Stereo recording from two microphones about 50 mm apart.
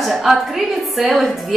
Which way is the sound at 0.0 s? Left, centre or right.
Centre.